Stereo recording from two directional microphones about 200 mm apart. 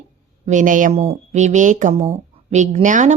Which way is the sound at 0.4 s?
40° right (ahead or behind).